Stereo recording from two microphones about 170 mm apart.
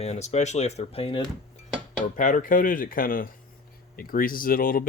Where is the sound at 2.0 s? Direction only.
50° left (ahead or behind).